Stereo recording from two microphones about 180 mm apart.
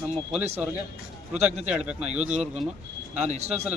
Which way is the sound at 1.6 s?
5° right (ahead or behind).